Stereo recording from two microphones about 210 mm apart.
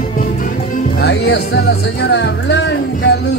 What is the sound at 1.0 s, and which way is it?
Music, 50° left (ahead or behind).